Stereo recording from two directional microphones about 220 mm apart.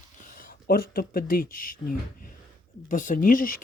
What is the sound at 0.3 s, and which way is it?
Speech, 45° left (ahead or behind).